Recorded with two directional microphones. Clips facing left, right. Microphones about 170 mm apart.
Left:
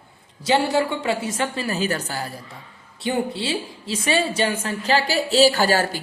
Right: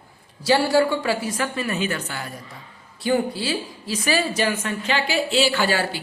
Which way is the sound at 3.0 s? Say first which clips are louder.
Right 2 dB; 25° left (ahead or behind).